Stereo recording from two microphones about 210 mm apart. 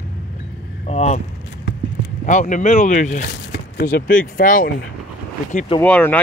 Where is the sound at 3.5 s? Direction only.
50° left (ahead or behind).